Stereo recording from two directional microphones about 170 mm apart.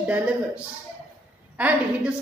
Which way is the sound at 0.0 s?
10° right (ahead or behind).